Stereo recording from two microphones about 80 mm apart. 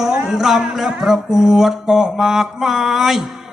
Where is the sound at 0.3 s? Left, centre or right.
Centre.